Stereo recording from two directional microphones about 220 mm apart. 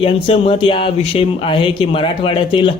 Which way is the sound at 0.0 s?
25° left (ahead or behind).